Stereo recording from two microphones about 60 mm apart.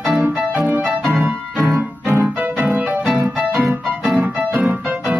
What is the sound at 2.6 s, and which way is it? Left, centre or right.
Music, centre.